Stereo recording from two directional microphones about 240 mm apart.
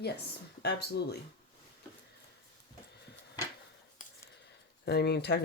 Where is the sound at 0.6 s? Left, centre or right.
Left.